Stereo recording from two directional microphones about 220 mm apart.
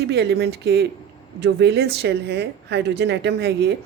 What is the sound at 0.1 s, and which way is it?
Speech, 50° right (ahead or behind).